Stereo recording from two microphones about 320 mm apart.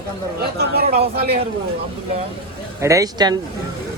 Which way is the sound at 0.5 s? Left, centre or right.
Right.